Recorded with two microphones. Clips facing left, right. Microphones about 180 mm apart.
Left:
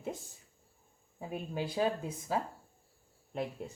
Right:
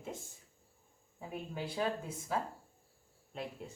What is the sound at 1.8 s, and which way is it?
Speech, 25° left (ahead or behind).